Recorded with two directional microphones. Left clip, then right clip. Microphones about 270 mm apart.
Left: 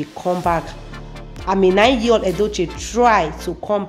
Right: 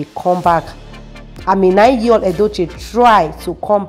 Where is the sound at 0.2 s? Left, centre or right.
Centre.